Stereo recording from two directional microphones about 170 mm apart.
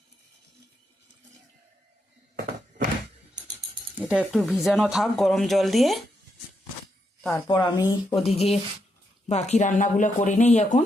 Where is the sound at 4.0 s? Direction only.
5° right (ahead or behind).